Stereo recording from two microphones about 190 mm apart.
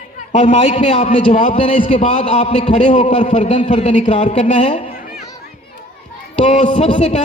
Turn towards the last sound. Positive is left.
turn(degrees=40)  # may be behind; listen again after turning